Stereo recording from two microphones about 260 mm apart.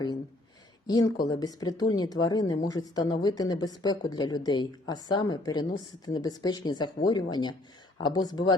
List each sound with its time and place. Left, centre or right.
0.9 s speech: centre